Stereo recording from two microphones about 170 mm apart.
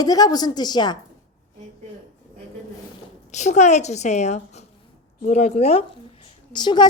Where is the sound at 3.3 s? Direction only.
45° left (ahead or behind).